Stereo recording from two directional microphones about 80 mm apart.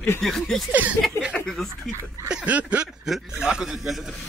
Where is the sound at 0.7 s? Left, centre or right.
Centre.